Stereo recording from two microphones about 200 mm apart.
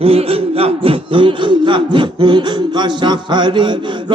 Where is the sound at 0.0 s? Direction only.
30° right (ahead or behind).